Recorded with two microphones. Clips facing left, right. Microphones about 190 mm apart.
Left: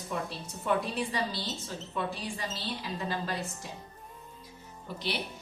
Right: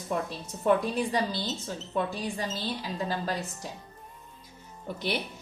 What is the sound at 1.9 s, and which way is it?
A woman's voice, 45° right (ahead or behind).